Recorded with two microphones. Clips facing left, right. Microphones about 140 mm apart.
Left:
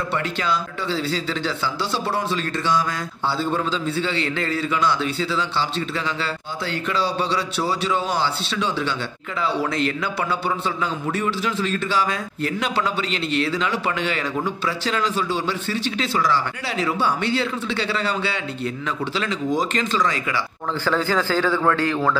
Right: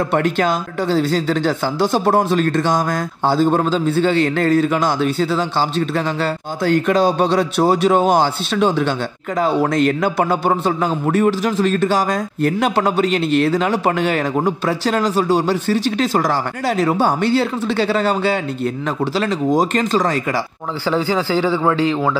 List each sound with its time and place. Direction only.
0.1 s a man's voice: 50° right (ahead or behind)
20.8 s a man's voice: 15° right (ahead or behind)